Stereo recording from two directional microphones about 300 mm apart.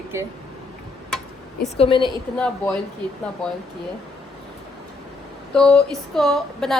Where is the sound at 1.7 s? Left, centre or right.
Centre.